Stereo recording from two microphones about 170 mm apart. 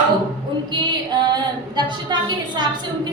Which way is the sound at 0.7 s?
25° right (ahead or behind).